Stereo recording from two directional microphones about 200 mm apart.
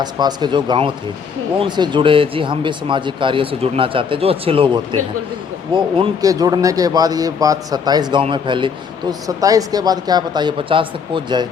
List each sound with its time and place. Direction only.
0.0 s a man's voice: 20° right (ahead or behind)